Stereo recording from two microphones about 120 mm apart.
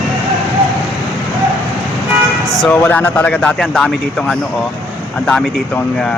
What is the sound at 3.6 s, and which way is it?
Speech, 5° left (ahead or behind).